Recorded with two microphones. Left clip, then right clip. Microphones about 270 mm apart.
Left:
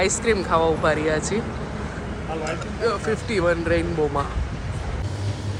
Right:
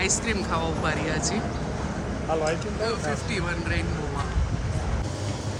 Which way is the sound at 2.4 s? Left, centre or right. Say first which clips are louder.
Left 2 dB; centre.